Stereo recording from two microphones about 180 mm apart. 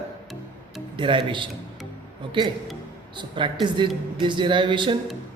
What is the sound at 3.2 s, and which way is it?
Speech, 25° right (ahead or behind).